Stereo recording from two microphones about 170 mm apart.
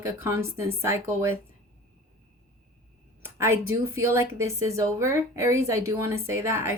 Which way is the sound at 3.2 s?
15° right (ahead or behind).